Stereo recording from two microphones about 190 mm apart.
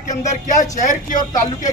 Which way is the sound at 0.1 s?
40° left (ahead or behind).